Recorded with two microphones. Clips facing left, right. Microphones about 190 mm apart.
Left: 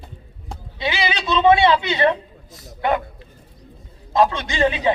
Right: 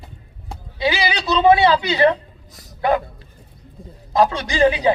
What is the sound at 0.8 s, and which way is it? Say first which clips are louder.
Speech: right 3 dB; 20° left (ahead or behind).